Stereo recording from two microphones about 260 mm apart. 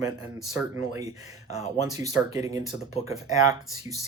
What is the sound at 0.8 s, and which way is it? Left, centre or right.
Speech, centre.